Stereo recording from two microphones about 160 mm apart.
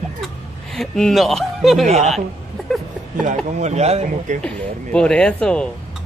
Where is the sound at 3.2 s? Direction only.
45° right (ahead or behind).